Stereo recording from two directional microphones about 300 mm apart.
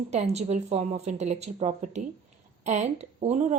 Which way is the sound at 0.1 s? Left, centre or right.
Right.